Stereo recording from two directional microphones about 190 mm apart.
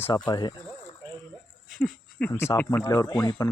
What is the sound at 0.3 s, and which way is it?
Speech, 20° left (ahead or behind).